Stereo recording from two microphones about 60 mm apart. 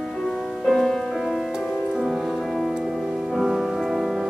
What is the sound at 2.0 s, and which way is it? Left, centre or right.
Music, centre.